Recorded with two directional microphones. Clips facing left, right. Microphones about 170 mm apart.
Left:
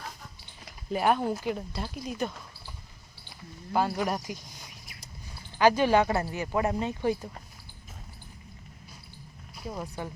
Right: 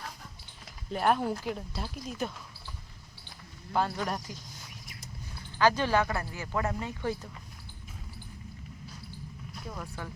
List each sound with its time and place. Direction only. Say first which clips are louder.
0.6 s speech: left 2 dB; 5° left (ahead or behind)
3.7 s speech: left 3 dB; 10° left (ahead or behind)
5.5 s speech: left 4 dB; 15° left (ahead or behind)
6.1 s speech: left 6 dB; 30° left (ahead or behind)
6.3 s speech: left 4 dB; 20° left (ahead or behind)
9.6 s speech: left 5 dB; 20° left (ahead or behind)